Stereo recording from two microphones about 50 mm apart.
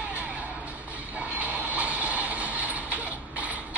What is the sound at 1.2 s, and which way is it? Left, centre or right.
Train, right.